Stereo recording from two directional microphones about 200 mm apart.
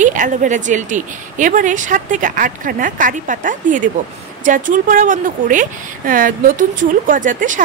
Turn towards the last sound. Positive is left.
turn(degrees=-40)  # may be behind; listen again after turning